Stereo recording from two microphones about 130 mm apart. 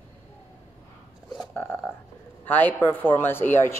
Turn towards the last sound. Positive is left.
turn(degrees=15)  # may be behind; listen again after turning